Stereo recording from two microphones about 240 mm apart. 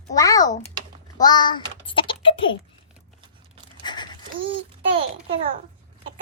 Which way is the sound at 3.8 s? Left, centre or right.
Centre.